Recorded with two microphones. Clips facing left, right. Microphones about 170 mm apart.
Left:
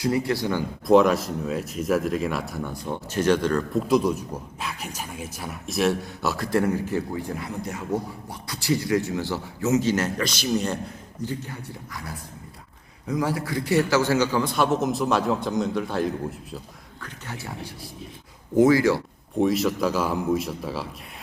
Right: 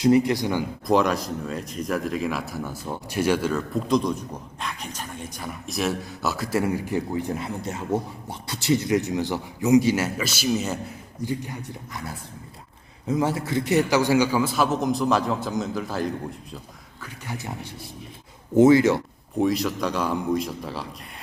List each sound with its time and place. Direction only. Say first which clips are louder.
0.0 s a man's voice: right 5 dB; 20° right (ahead or behind)
0.9 s a man's voice: left 4 dB; centre (ahead or behind)
3.8 s a man's voice: even; 5° left (ahead or behind); by 11.5 s 15° right (ahead or behind)
13.1 s a man's voice: right 2 dB; 25° right (ahead or behind); by 16.6 s centre (ahead or behind)
17.0 s a man's voice: right 2 dB; 15° right (ahead or behind)
18.5 s speech: right 2 dB; 25° right (ahead or behind)
19.4 s a man's voice: left 1 dB; centre (ahead or behind)